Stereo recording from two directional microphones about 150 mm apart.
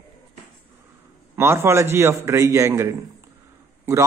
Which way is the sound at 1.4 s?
15° right (ahead or behind).